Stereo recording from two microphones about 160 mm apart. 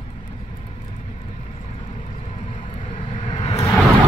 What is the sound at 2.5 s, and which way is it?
Vehicle, 50° left (ahead or behind).